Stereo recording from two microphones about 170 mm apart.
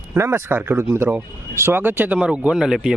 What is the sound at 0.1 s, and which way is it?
Speech, 15° right (ahead or behind).